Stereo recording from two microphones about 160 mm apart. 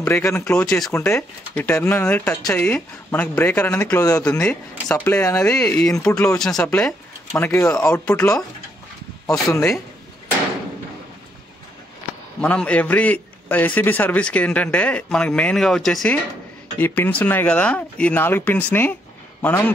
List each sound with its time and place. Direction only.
0.0 s a man's voice: 15° left (ahead or behind)
0.9 s a man's voice: 15° left (ahead or behind)
7.3 s a man's voice: 15° left (ahead or behind)
12.4 s a man's voice: 5° left (ahead or behind)